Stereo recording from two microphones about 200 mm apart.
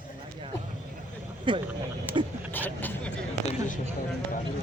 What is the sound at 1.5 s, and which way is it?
Speech, 25° right (ahead or behind).